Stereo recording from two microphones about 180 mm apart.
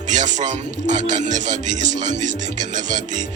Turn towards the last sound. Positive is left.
turn(degrees=-45)  # may be behind; listen again after turning